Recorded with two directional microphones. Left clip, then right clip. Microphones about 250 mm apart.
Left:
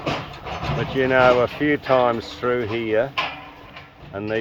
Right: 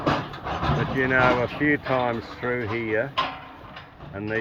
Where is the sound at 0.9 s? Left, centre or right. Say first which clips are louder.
Left 5 dB; left.